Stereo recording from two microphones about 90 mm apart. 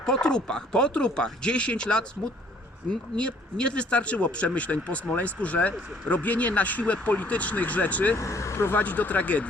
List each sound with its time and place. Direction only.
0.0 s speech: 10° left (ahead or behind)
3.2 s speech: 10° left (ahead or behind)
8.1 s speech: 35° left (ahead or behind)
8.8 s speech: 15° left (ahead or behind)